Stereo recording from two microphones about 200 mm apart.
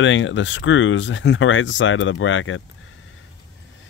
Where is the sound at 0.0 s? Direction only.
70° left (ahead or behind).